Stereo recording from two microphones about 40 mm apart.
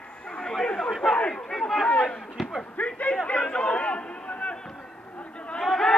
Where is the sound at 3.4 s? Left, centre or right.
Left.